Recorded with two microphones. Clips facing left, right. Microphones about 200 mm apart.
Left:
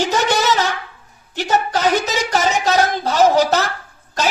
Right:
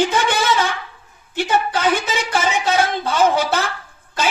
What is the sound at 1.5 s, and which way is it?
A man's voice, 40° left (ahead or behind).